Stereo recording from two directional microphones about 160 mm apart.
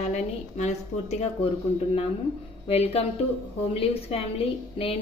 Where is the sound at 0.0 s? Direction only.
45° left (ahead or behind).